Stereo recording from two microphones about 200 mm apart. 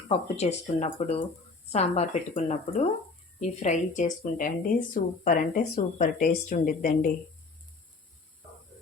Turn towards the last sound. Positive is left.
turn(degrees=45)  # may be behind; listen again after turning